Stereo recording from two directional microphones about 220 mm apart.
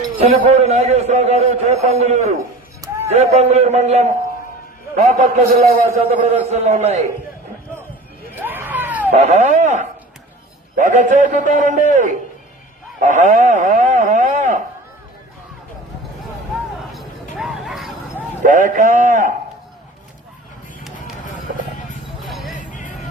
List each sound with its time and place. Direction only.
0.3 s a man's voice: 30° right (ahead or behind)
8.4 s a sound: 10° right (ahead or behind)
9.1 s a man's voice: 30° right (ahead or behind)
17.3 s a sound: centre (ahead or behind)
18.4 s a man's voice: 35° right (ahead or behind)
22.2 s vehicle: centre (ahead or behind)
22.5 s music: 35° left (ahead or behind)